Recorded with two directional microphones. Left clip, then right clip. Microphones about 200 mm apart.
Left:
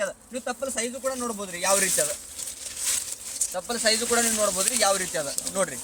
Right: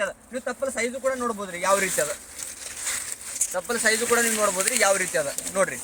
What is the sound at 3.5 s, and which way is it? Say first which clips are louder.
Speech: right 2 dB; 10° right (ahead or behind).